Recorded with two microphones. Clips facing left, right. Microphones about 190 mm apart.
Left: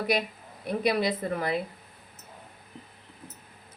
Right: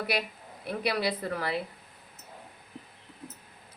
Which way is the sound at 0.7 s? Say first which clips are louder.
Left 4 dB; 20° left (ahead or behind).